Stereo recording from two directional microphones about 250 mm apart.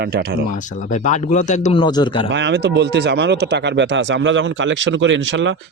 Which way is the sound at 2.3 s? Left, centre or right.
Right.